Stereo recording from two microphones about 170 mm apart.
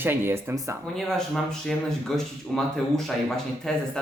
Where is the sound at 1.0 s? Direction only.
Centre (ahead or behind).